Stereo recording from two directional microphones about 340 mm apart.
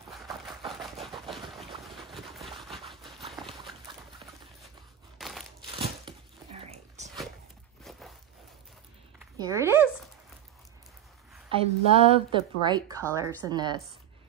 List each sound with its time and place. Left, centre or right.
0.8 s a sound: centre
5.2 s crumpling: centre
5.6 s crumpling: centre
7.0 s a sound: centre
9.4 s speech: centre
11.4 s a woman's voice: centre